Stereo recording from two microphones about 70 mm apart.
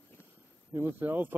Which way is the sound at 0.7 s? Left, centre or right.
Right.